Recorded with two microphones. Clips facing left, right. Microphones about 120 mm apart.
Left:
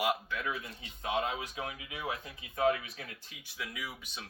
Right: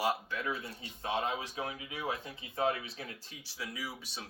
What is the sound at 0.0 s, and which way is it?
Speech, 35° right (ahead or behind).